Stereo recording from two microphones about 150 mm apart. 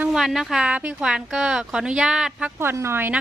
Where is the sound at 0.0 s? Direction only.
5° right (ahead or behind).